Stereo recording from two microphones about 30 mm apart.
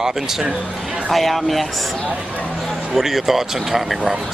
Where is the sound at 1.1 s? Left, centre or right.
Centre.